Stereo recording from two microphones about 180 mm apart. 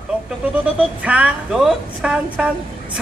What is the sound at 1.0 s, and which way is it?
A woman's voice, 5° right (ahead or behind).